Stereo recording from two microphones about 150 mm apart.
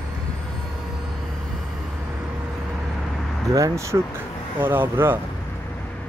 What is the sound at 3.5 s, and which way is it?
Speech, 20° right (ahead or behind).